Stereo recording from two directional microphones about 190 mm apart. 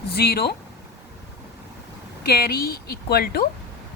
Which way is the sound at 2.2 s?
55° left (ahead or behind).